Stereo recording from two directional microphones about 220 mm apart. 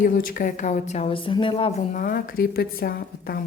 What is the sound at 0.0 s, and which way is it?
Speech, 40° left (ahead or behind).